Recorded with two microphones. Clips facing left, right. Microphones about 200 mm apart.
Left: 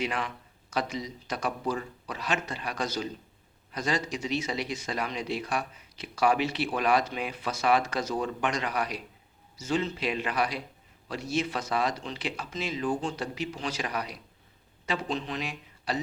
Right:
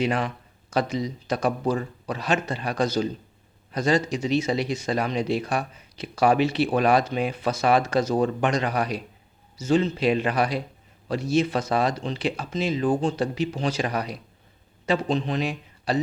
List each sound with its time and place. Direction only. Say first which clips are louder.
0.0 s speech: right 7 dB; 30° right (ahead or behind)
8.1 s a man's voice: right 5 dB; 40° right (ahead or behind)